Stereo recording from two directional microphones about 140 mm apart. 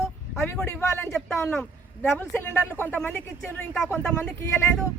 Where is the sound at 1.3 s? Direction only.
20° left (ahead or behind).